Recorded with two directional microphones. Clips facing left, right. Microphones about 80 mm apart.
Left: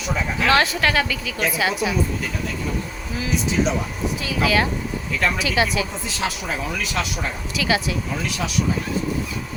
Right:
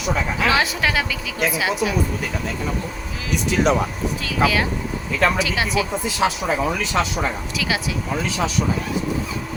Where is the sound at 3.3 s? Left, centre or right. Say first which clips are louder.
Right 3 dB; right.